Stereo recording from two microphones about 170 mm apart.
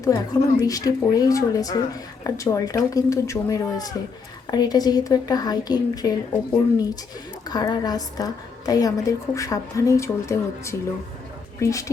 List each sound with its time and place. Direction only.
0.0 s a woman's voice: 20° left (ahead or behind)
7.4 s a woman's voice: 25° left (ahead or behind)